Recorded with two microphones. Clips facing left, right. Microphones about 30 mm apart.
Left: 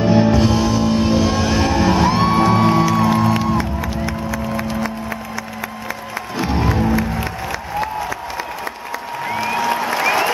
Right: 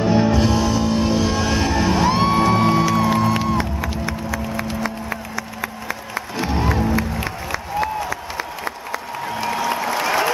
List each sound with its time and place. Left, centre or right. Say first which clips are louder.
0.0 s music: left 3 dB; centre
6.4 s music: left 2 dB; centre
7.5 s applause: right 2 dB; centre
9.2 s applause: left 3 dB; left